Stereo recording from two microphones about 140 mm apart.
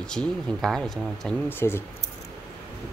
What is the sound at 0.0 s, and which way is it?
Speech, 5° left (ahead or behind).